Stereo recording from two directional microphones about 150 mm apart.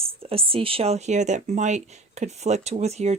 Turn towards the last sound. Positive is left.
turn(degrees=-45)  # may be behind; listen again after turning